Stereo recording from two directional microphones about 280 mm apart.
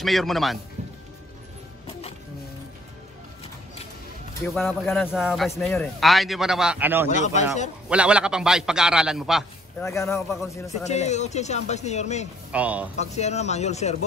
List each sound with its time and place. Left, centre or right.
0.0 s a man's voice: centre
4.6 s a man's voice: centre
7.1 s speech: left
7.9 s a man's voice: centre
9.8 s a man's voice: centre
10.9 s speech: left
12.5 s a man's voice: centre
12.9 s speech: left